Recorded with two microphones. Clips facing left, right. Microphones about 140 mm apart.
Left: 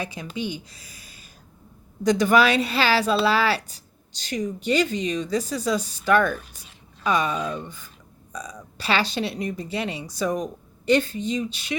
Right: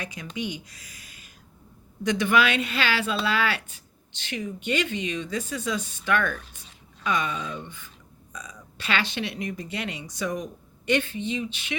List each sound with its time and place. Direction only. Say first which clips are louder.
0.0 s speech: left 3 dB; 30° left (ahead or behind)